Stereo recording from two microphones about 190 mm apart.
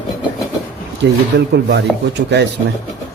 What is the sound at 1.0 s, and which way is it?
Speech, 60° right (ahead or behind).